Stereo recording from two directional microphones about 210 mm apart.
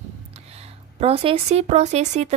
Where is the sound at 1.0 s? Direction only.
30° right (ahead or behind).